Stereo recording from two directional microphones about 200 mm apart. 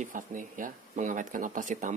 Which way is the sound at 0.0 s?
40° right (ahead or behind).